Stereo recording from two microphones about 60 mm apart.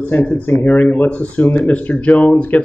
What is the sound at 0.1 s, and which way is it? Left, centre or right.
Speech, left.